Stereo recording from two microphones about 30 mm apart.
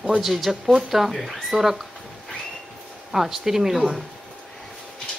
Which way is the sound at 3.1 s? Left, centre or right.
Centre.